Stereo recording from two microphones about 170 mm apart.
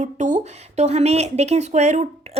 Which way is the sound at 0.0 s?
45° right (ahead or behind).